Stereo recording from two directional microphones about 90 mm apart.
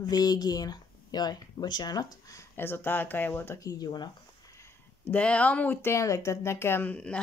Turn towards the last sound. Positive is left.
turn(degrees=25)  # may be behind; listen again after turning